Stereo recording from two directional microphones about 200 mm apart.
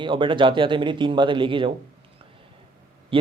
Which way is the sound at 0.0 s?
25° right (ahead or behind).